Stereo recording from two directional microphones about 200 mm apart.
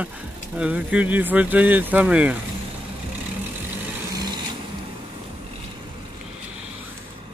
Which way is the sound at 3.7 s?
20° right (ahead or behind).